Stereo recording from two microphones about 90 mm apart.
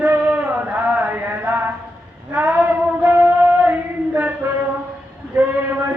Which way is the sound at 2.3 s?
20° right (ahead or behind).